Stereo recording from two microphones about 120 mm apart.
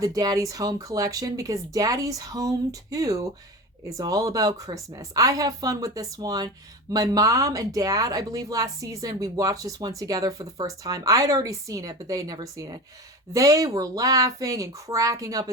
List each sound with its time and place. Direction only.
0.0 s speech: 30° right (ahead or behind)